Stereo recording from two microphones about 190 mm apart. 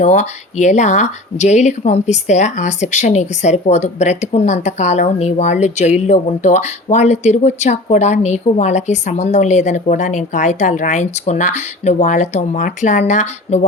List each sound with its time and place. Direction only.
0.0 s speech: 40° left (ahead or behind)